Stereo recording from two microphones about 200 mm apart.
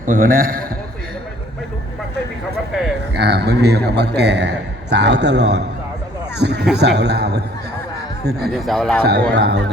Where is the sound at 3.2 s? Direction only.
55° right (ahead or behind).